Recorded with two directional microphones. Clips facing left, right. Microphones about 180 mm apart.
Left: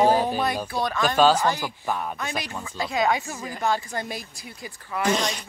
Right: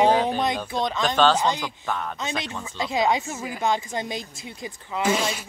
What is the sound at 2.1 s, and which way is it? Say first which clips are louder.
Speech: right 1 dB; 20° right (ahead or behind).